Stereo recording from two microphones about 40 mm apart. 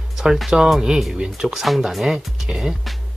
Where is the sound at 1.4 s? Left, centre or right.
Centre.